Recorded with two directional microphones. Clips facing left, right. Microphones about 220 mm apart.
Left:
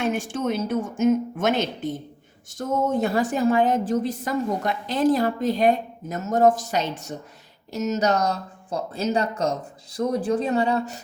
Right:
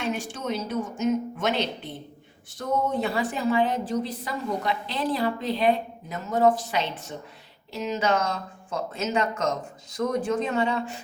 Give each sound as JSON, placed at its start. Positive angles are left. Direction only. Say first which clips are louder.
{"t": 0.0, "sound": "a woman's voice", "louder": "left 5 dB", "side_deg": 50}